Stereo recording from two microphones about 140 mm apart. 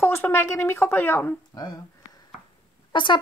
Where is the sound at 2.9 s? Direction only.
35° left (ahead or behind).